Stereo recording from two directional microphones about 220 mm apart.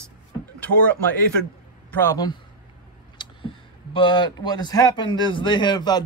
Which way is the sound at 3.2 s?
20° left (ahead or behind).